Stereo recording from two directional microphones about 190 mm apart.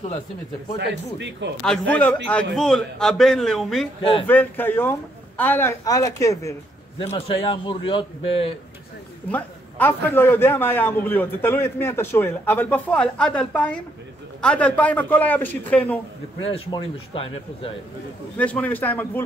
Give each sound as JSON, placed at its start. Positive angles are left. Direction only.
{"t": 0.7, "sound": "speech", "side_deg": -65}
{"t": 1.6, "sound": "a man's voice", "side_deg": 5}
{"t": 7.0, "sound": "a man's voice", "side_deg": 30}
{"t": 9.3, "sound": "a man's voice", "side_deg": 10}
{"t": 16.4, "sound": "a man's voice", "side_deg": 30}
{"t": 18.4, "sound": "a man's voice", "side_deg": 5}